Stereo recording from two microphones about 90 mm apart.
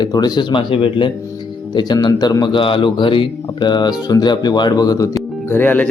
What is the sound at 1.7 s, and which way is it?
Speech, 55° left (ahead or behind).